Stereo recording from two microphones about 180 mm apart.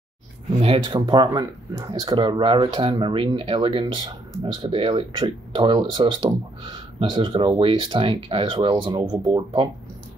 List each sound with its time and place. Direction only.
0.6 s speech: 30° right (ahead or behind)